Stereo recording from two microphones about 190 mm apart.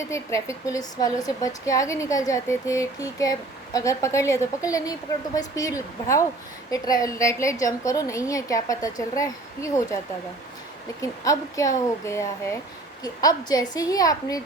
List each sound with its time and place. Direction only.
0.0 s speech: 15° left (ahead or behind)
11.0 s a woman's voice: 15° left (ahead or behind)